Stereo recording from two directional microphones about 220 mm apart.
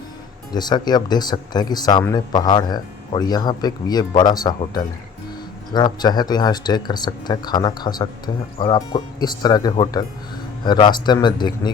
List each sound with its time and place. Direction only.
0.5 s speech: 20° left (ahead or behind)